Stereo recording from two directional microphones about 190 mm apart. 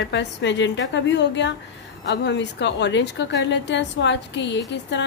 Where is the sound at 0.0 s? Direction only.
65° left (ahead or behind).